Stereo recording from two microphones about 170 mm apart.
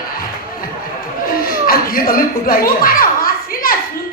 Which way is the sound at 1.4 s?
55° left (ahead or behind).